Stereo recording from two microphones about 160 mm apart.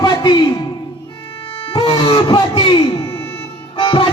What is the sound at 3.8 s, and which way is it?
Music, 30° left (ahead or behind).